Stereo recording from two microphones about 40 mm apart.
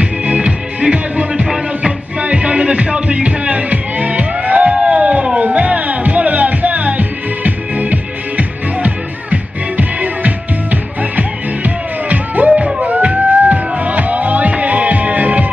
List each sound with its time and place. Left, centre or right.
0.0 s music: right
1.4 s music: centre
2.1 s music: right
12.4 s music: right
12.8 s music: right